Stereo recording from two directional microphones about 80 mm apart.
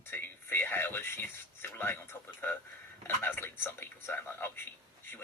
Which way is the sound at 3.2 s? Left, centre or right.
Left.